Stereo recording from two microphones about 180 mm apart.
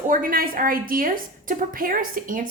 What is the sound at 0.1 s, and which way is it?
A woman's voice, 50° right (ahead or behind).